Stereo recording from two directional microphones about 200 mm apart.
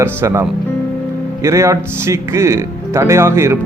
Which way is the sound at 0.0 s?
10° right (ahead or behind).